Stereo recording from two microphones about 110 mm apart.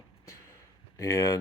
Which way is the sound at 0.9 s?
25° left (ahead or behind).